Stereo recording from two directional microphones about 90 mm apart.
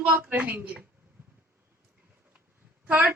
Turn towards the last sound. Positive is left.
turn(degrees=-20)  # may be behind; listen again after turning